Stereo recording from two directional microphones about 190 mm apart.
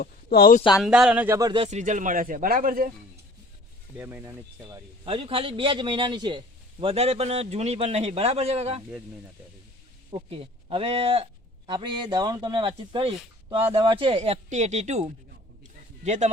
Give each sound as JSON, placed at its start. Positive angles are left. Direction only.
{"t": 0.0, "sound": "speech", "side_deg": 50}
{"t": 0.8, "sound": "speech", "side_deg": -5}
{"t": 1.6, "sound": "speech", "side_deg": -40}
{"t": 3.9, "sound": "speech", "side_deg": -10}
{"t": 5.0, "sound": "speech", "side_deg": -30}
{"t": 10.1, "sound": "a man's voice", "side_deg": -30}
{"t": 15.6, "sound": "a sound", "side_deg": -40}